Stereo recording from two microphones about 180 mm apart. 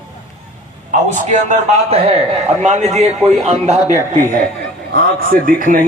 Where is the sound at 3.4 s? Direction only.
40° right (ahead or behind).